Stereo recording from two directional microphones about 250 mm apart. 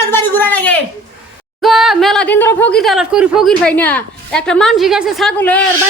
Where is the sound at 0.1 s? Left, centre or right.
Centre.